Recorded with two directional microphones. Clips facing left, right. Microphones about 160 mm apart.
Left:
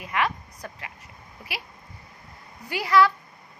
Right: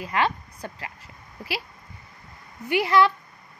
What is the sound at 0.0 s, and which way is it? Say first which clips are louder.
Speech: right 2 dB; 30° right (ahead or behind).